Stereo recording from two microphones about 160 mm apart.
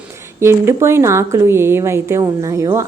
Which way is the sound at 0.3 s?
15° right (ahead or behind).